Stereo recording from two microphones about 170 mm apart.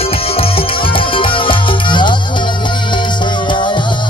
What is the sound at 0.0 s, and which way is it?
Music, 35° left (ahead or behind).